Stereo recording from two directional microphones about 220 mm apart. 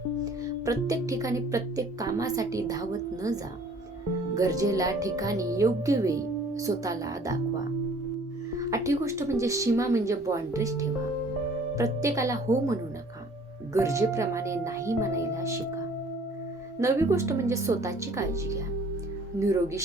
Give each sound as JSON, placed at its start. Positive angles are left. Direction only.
{"t": 0.4, "sound": "speech", "side_deg": -15}
{"t": 4.4, "sound": "speech", "side_deg": -15}
{"t": 8.5, "sound": "speech", "side_deg": -15}
{"t": 16.8, "sound": "speech", "side_deg": -10}